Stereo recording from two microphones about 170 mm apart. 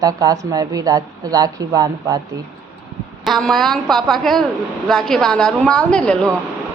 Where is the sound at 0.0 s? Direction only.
20° right (ahead or behind).